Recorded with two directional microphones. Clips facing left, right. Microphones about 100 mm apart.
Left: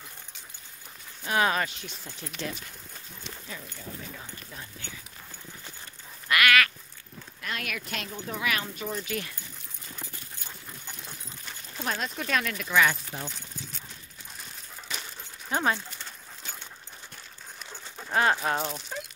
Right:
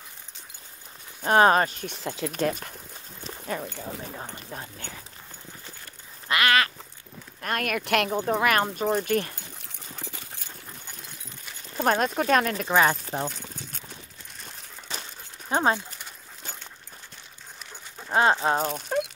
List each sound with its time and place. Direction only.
1.2 s speech: 45° right (ahead or behind)
1.9 s speech: 75° right (ahead or behind)
2.3 s speech: 50° right (ahead or behind)
4.0 s speech: 40° right (ahead or behind)
6.2 s quack: 30° right (ahead or behind)
7.4 s speech: 50° right (ahead or behind); by 8.2 s 65° right (ahead or behind)
8.2 s speech: 50° right (ahead or behind)
11.7 s speech: 50° right (ahead or behind)
13.1 s clip-clop: 50° right (ahead or behind)
14.9 s dog: 30° right (ahead or behind)
18.1 s speech: 25° right (ahead or behind)
18.6 s speech: 50° right (ahead or behind)